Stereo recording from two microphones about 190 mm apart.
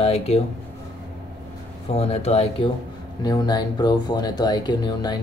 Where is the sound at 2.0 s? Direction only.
30° left (ahead or behind).